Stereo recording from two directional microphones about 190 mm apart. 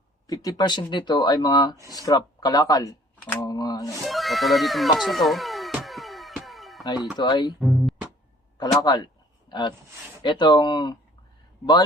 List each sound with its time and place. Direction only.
0.3 s speech: 20° left (ahead or behind)
4.0 s music: centre (ahead or behind)
6.8 s speech: 20° left (ahead or behind)
7.6 s music: centre (ahead or behind)
8.8 s speech: 20° left (ahead or behind)